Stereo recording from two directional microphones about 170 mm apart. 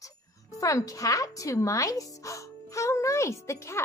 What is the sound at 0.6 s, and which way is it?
A woman's voice, 20° left (ahead or behind).